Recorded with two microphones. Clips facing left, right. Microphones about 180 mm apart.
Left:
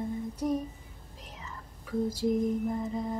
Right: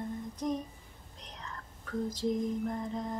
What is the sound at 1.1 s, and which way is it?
Whispering, 5° left (ahead or behind).